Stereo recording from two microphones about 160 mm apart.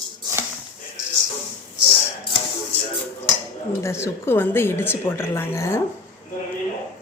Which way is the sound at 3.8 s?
15° left (ahead or behind).